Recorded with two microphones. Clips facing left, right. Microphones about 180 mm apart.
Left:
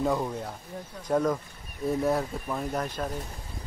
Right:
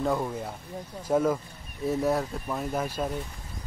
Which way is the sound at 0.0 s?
Centre (ahead or behind).